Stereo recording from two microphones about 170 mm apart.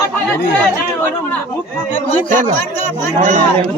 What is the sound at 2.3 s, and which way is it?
Speech, 45° right (ahead or behind).